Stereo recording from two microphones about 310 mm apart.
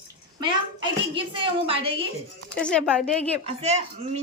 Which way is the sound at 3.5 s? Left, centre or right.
Centre.